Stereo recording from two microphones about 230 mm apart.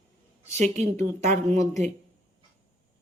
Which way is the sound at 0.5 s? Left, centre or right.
Right.